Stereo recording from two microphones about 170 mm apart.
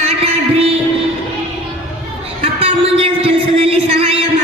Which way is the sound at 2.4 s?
35° right (ahead or behind).